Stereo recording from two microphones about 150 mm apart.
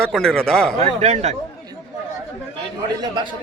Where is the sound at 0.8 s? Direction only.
45° right (ahead or behind).